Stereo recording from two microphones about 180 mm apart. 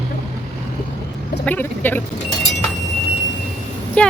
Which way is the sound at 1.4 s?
10° left (ahead or behind).